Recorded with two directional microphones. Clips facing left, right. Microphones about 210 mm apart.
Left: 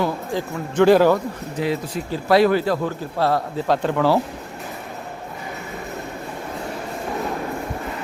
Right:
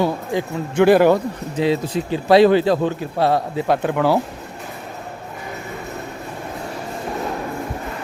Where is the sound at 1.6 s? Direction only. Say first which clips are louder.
Right 5 dB; 25° right (ahead or behind).